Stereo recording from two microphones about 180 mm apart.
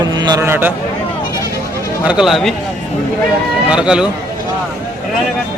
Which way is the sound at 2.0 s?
5° right (ahead or behind).